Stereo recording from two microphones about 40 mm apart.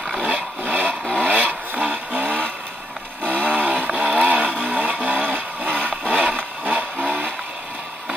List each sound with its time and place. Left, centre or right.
0.2 s vehicle: right
1.2 s a sound: right
1.9 s vehicle: right
3.3 s chainsaw: right
3.8 s vehicle: right
4.6 s a sound: right
7.1 s music: right